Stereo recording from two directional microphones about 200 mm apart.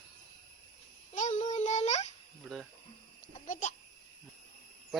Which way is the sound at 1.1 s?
40° left (ahead or behind).